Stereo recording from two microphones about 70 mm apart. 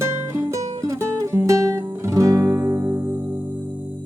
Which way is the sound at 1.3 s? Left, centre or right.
Right.